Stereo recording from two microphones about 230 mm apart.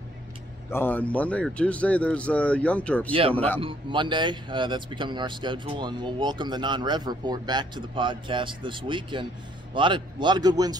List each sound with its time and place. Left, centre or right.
0.7 s speech: centre
3.1 s speech: right
3.3 s a man's voice: centre
3.6 s speech: right